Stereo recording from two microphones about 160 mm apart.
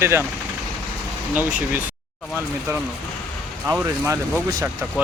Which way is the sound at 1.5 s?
10° right (ahead or behind).